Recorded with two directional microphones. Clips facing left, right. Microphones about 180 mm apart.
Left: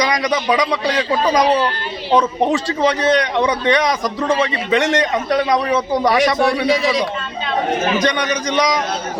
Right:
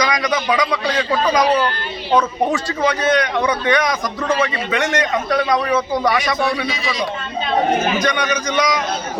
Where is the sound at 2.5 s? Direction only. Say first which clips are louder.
Left 2 dB; 30° left (ahead or behind).